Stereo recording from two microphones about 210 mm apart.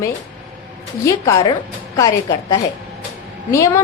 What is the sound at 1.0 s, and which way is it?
A woman's voice, 15° left (ahead or behind).